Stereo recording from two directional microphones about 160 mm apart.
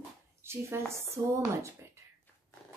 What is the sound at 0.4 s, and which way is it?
Speech, 15° right (ahead or behind).